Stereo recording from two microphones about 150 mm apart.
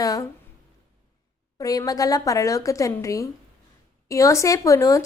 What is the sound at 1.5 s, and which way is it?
A woman's voice, 25° left (ahead or behind).